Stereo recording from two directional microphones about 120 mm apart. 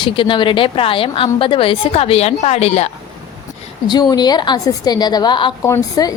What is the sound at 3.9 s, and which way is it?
A woman's voice, 35° left (ahead or behind).